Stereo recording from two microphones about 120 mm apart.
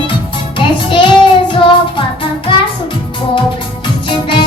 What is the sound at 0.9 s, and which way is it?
Child singing, 40° left (ahead or behind).